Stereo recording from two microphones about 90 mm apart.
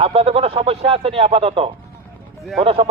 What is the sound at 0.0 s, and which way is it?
A man's voice, 90° right.